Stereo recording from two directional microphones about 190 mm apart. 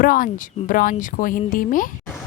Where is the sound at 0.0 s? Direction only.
45° left (ahead or behind).